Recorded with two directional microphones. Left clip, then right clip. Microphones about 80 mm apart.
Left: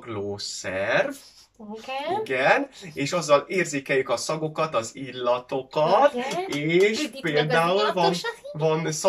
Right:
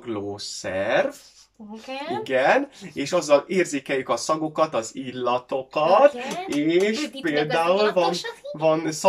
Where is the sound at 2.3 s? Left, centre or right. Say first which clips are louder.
Right 3 dB; right.